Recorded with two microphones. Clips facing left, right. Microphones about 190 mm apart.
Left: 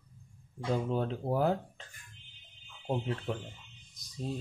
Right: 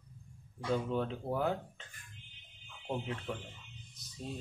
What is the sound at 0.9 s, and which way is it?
Speech, 35° left (ahead or behind).